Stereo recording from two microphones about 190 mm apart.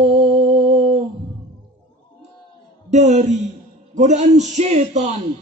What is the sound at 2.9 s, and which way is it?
Music, 35° right (ahead or behind).